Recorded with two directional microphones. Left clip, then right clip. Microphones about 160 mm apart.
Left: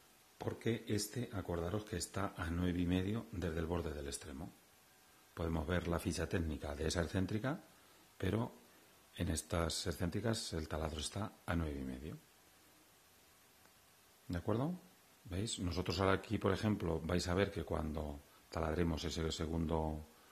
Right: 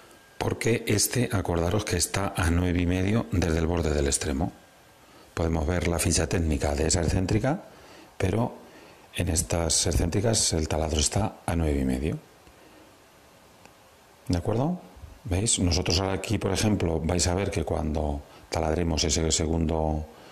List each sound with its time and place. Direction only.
0.4 s speech: 45° right (ahead or behind); by 12.2 s 15° right (ahead or behind)
14.3 s speech: 20° right (ahead or behind)